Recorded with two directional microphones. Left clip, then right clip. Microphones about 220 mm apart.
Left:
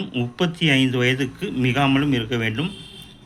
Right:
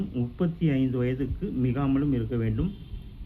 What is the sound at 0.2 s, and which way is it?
Speech, 5° left (ahead or behind).